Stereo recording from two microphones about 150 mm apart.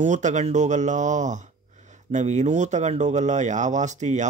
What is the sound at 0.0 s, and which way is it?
Speech, 55° right (ahead or behind).